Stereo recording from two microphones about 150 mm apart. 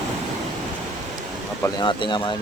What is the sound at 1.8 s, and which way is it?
Speech, 30° left (ahead or behind).